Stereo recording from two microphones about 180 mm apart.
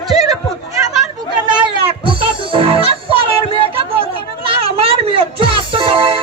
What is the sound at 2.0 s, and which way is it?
Music, 30° right (ahead or behind).